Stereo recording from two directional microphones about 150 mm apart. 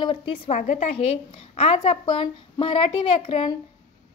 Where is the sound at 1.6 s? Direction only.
40° left (ahead or behind).